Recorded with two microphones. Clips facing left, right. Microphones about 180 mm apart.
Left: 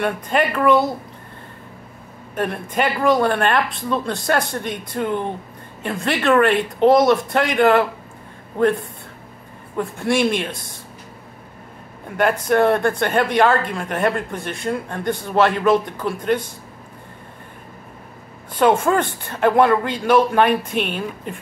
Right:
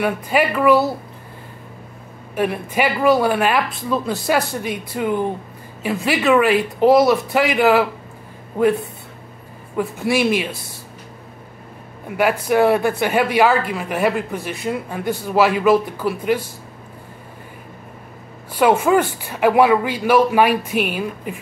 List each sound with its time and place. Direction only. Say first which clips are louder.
0.0 s speech: right 1 dB; 5° right (ahead or behind)
2.3 s speech: right 2 dB; 5° right (ahead or behind)
9.8 s speech: even; 5° right (ahead or behind)
12.2 s speech: right 1 dB; 5° right (ahead or behind)
18.5 s speech: right 1 dB; 5° right (ahead or behind)